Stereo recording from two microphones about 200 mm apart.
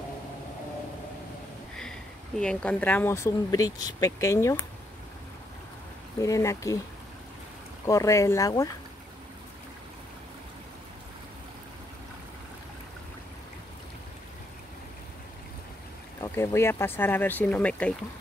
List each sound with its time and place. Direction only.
1.8 s speech: 5° left (ahead or behind)
6.1 s speech: 15° left (ahead or behind)
7.8 s speech: 15° left (ahead or behind)
16.2 s speech: 15° left (ahead or behind)